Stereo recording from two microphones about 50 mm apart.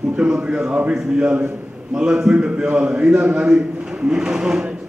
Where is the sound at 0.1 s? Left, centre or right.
Right.